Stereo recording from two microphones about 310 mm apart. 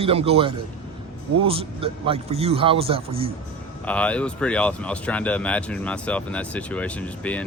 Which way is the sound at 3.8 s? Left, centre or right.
Centre.